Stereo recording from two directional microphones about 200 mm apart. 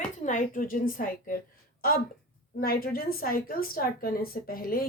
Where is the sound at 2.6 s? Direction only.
50° left (ahead or behind).